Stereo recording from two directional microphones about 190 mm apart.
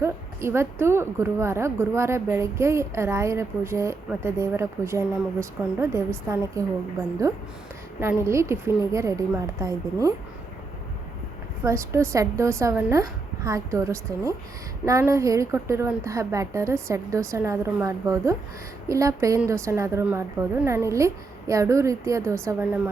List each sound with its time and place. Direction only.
0.0 s a woman's voice: 15° right (ahead or behind)
11.6 s a woman's voice: 15° right (ahead or behind)